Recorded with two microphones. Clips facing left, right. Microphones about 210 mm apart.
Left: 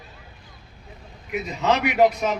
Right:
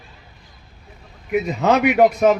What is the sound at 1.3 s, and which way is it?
A man's voice, 55° right (ahead or behind).